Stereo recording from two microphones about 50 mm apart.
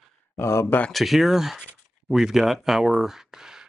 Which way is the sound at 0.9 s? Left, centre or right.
Centre.